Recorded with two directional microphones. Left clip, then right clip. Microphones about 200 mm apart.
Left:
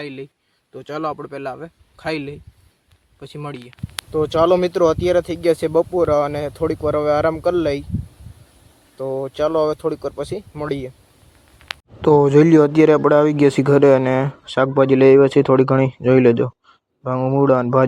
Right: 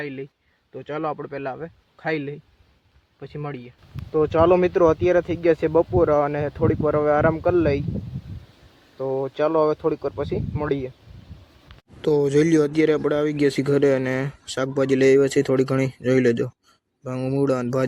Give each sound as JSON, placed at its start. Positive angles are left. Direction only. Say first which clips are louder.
{"t": 0.0, "sound": "a man's voice", "louder": "left 1 dB", "side_deg": 20}
{"t": 9.0, "sound": "a man's voice", "louder": "left 2 dB", "side_deg": 10}
{"t": 12.0, "sound": "a man's voice", "louder": "left 7 dB", "side_deg": 15}